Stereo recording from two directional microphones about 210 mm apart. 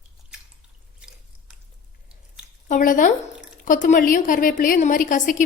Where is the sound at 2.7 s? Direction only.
40° left (ahead or behind).